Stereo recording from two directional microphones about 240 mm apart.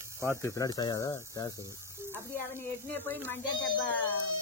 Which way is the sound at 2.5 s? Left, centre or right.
Centre.